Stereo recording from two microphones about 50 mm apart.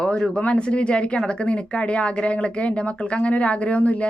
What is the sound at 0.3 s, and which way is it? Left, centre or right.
A woman's voice, left.